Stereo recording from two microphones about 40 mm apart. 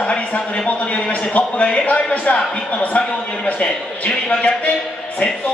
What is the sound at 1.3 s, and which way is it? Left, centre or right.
A man's voice, left.